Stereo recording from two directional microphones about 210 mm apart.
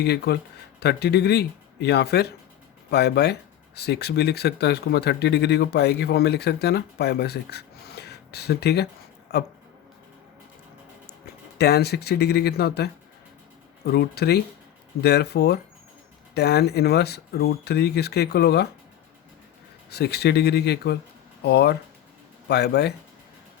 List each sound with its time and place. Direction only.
0.0 s speech: 50° left (ahead or behind)
11.5 s speech: 50° left (ahead or behind)
19.9 s speech: 50° left (ahead or behind)